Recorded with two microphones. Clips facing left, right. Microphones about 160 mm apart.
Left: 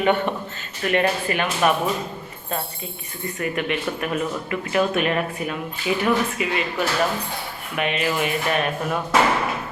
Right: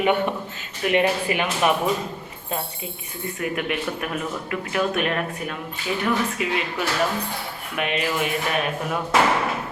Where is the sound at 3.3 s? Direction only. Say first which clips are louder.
Left 1 dB; 5° right (ahead or behind).